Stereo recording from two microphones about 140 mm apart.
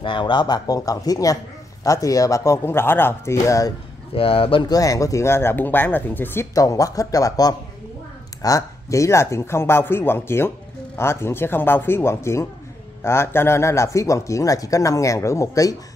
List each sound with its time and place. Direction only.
0.0 s a man's voice: 35° left (ahead or behind)
4.1 s a man's voice: 40° left (ahead or behind); by 15.7 s 25° left (ahead or behind)